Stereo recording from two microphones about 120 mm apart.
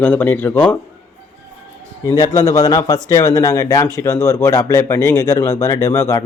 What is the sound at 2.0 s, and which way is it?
Speech, 30° left (ahead or behind).